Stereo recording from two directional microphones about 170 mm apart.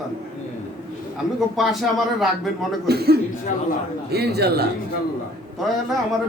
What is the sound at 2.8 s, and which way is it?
Speech, 70° right (ahead or behind).